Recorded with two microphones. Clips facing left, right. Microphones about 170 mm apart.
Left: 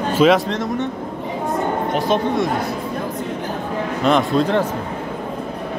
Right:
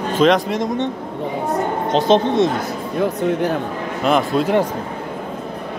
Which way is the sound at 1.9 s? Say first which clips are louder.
Right 7 dB; 25° right (ahead or behind).